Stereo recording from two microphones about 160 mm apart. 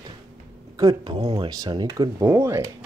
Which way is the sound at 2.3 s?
15° right (ahead or behind).